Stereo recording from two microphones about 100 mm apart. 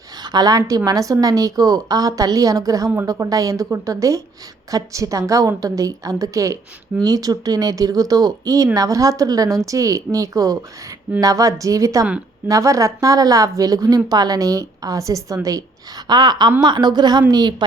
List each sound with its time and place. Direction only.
0.2 s a woman's voice: 45° right (ahead or behind)
16.0 s a woman's voice: 45° right (ahead or behind)